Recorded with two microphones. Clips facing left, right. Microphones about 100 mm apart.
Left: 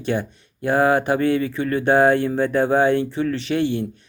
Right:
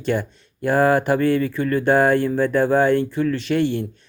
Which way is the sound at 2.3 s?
20° left (ahead or behind).